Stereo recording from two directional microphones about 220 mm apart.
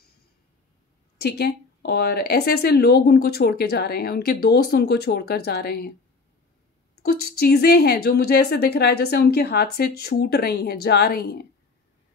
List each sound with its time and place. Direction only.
1.1 s a woman's voice: 50° left (ahead or behind)
7.0 s a woman's voice: 45° left (ahead or behind)